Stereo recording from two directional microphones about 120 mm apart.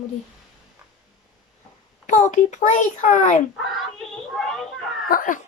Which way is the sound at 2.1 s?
90° left.